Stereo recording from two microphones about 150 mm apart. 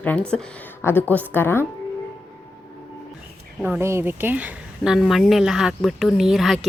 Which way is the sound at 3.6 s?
15° right (ahead or behind).